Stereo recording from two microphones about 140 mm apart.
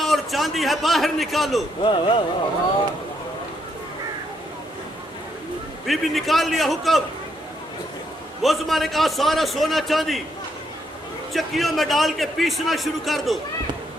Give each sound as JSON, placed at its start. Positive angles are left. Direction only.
{"t": 0.0, "sound": "a man's voice", "side_deg": 0}
{"t": 1.8, "sound": "speech", "side_deg": 40}
{"t": 5.8, "sound": "a man's voice", "side_deg": 0}
{"t": 8.4, "sound": "a man's voice", "side_deg": 0}
{"t": 11.3, "sound": "a man's voice", "side_deg": 0}